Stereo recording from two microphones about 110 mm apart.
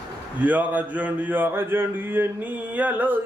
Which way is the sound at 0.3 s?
15° right (ahead or behind).